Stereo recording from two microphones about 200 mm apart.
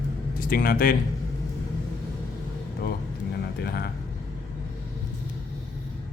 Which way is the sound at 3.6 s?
50° left (ahead or behind).